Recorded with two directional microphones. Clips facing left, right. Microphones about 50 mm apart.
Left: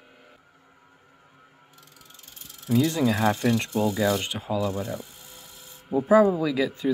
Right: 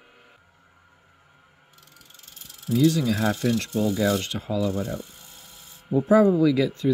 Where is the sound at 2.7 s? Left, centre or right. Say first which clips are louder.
Right 2 dB; left.